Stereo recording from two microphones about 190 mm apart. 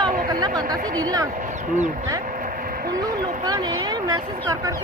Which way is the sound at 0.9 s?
20° right (ahead or behind).